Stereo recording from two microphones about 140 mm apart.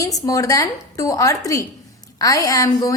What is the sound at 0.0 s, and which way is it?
A woman's voice, 25° left (ahead or behind).